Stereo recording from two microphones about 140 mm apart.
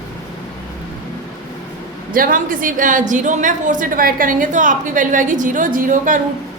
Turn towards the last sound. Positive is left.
turn(degrees=-70)  # may be behind; listen again after turning